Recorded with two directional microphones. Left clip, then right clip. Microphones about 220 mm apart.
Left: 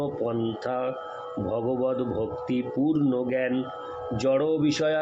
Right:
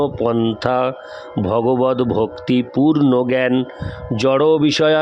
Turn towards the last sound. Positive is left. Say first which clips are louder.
# right 10 dB
turn(degrees=-50)  # may be behind; listen again after turning